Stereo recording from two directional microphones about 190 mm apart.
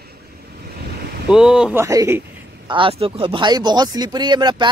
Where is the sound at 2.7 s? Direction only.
30° right (ahead or behind).